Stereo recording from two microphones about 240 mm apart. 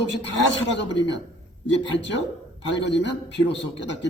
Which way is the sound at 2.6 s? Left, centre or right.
Left.